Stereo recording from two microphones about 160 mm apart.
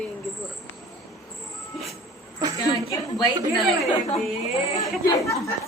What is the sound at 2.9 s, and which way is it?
Speech, 25° left (ahead or behind).